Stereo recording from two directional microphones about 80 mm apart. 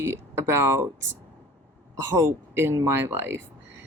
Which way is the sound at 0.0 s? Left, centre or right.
Right.